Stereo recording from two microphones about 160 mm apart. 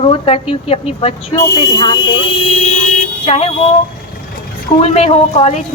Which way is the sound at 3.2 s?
40° left (ahead or behind).